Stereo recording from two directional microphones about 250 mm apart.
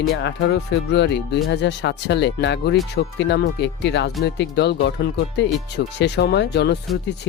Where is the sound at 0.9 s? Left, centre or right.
Left.